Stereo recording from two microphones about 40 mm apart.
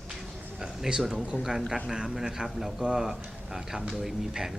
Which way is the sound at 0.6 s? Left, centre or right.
Centre.